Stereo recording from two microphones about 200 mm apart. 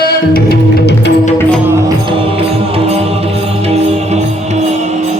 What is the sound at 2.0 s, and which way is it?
Music, 30° right (ahead or behind).